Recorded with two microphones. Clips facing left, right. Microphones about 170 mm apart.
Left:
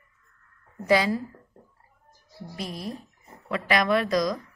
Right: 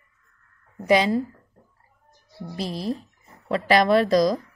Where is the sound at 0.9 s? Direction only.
20° right (ahead or behind).